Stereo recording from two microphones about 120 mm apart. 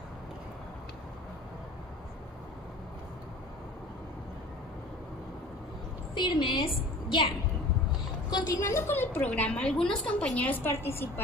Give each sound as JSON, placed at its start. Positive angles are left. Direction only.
{"t": 6.1, "sound": "a woman's voice", "side_deg": 40}
{"t": 8.3, "sound": "a woman's voice", "side_deg": 35}